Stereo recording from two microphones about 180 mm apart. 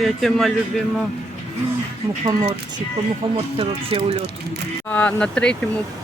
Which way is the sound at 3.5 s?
30° right (ahead or behind).